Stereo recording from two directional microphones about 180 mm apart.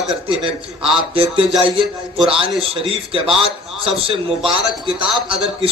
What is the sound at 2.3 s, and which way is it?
A man's voice, 30° right (ahead or behind).